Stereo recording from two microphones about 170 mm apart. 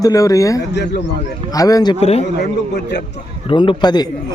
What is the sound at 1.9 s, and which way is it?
Speech, 35° left (ahead or behind).